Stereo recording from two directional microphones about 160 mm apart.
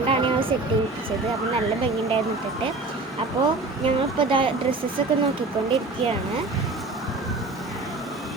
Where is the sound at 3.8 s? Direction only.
35° right (ahead or behind).